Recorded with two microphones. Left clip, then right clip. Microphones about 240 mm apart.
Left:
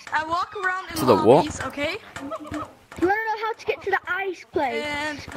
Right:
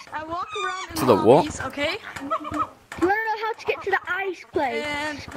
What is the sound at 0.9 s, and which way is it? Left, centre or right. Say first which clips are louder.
Speech: even; centre.